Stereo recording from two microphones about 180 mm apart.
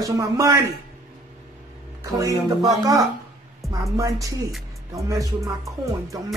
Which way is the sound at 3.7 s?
20° right (ahead or behind).